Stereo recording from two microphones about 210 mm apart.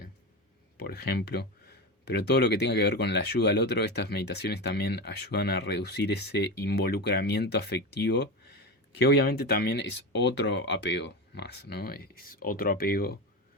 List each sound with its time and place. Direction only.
0.9 s speech: 50° left (ahead or behind)